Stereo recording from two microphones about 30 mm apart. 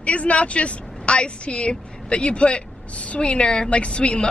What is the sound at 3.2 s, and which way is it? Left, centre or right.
Speech, left.